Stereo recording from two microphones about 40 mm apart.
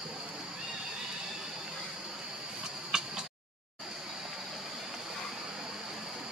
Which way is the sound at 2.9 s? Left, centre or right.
Centre.